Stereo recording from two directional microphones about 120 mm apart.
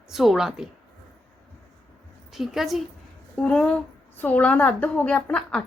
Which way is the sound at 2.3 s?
Centre (ahead or behind).